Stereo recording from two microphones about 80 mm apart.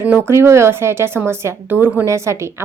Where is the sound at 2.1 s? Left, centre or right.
Right.